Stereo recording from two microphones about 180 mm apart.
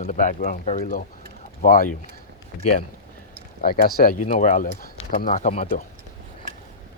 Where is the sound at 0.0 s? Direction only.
45° left (ahead or behind).